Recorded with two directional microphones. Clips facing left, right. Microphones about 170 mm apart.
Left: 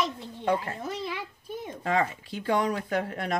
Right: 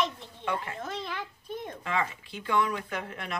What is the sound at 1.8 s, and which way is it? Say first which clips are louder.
Speech: left 6 dB; 45° left (ahead or behind).